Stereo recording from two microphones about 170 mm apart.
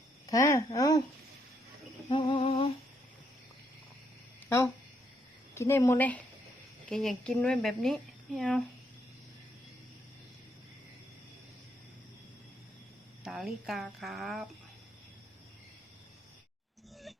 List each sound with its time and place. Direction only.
0.3 s speech: 20° left (ahead or behind)
2.1 s speech: 30° left (ahead or behind)
2.4 s humming: 35° left (ahead or behind)
4.4 s a woman's voice: 15° left (ahead or behind)
13.2 s a woman's voice: centre (ahead or behind)